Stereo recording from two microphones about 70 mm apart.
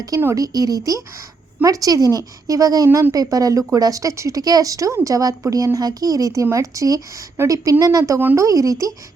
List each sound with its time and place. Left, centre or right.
0.3 s speech: right
3.8 s speech: right